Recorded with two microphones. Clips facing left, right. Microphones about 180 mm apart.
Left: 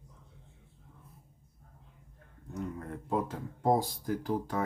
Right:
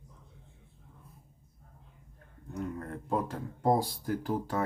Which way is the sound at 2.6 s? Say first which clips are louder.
Right 1 dB; 5° left (ahead or behind).